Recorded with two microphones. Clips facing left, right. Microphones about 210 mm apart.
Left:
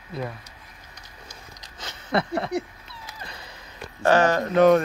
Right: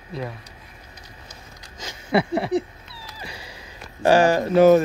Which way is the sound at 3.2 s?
10° right (ahead or behind).